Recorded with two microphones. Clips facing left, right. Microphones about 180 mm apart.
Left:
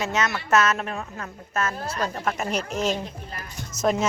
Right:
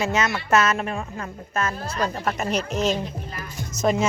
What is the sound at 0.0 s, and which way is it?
Speech, centre (ahead or behind).